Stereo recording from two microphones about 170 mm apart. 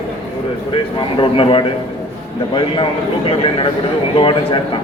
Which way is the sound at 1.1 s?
30° left (ahead or behind).